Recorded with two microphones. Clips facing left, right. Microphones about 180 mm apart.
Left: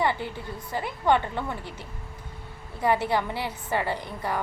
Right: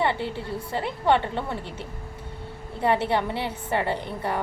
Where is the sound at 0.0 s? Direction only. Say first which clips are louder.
Right 1 dB; 25° right (ahead or behind).